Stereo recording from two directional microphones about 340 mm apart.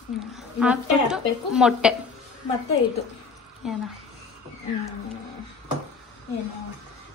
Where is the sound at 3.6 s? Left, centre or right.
Centre.